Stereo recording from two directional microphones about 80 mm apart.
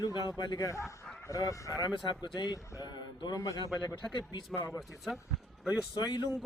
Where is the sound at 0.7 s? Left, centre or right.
Left.